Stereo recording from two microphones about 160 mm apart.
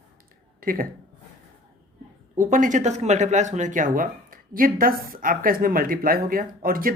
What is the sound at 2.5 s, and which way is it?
Speech, 50° right (ahead or behind).